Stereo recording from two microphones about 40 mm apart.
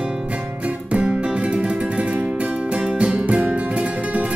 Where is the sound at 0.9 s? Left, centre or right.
Right.